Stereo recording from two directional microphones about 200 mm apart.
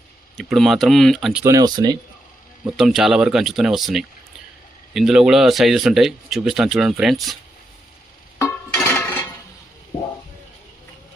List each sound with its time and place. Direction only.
0.3 s speech: centre (ahead or behind)
1.5 s speech: 20° right (ahead or behind)
2.7 s speech: centre (ahead or behind)
8.4 s music: 10° left (ahead or behind)